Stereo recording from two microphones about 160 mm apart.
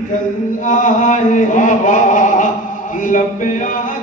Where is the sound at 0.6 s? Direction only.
55° left (ahead or behind).